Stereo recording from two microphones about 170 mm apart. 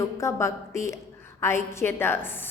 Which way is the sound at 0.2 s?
15° left (ahead or behind).